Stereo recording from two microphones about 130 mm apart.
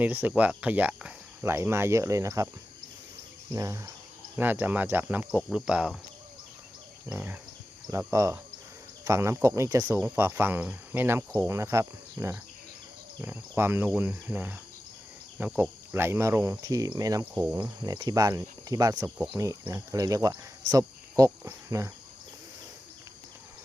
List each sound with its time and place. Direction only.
0.0 s speech: 15° right (ahead or behind)
3.5 s speech: 25° right (ahead or behind)
5.3 s cricket: centre (ahead or behind)
7.1 s speech: 15° right (ahead or behind)
17.3 s speech: 15° right (ahead or behind)
17.6 s speech: 35° right (ahead or behind)